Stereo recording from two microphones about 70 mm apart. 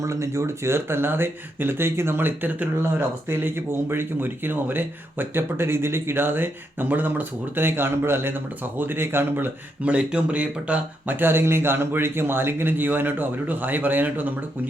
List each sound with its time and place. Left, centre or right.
0.0 s speech: right
9.8 s speech: centre